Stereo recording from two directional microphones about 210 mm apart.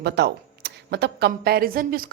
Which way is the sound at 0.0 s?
55° right (ahead or behind).